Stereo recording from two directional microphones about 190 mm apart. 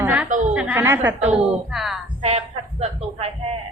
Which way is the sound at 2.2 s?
30° right (ahead or behind).